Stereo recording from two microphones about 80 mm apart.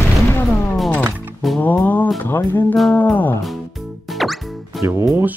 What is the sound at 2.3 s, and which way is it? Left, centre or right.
Music, left.